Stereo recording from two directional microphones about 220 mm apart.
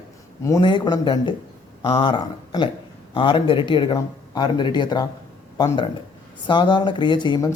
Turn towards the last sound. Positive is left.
turn(degrees=20)  # may be behind; listen again after turning